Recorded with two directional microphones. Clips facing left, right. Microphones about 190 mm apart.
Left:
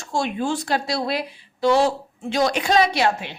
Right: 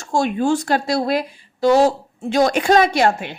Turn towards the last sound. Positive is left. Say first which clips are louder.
# right 4 dB
turn(degrees=-50)  # may be behind; listen again after turning